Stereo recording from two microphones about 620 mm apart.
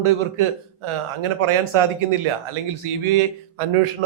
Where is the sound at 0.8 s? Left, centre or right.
Right.